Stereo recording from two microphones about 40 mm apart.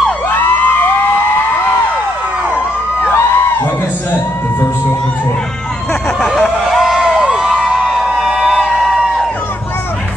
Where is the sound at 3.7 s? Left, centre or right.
Left.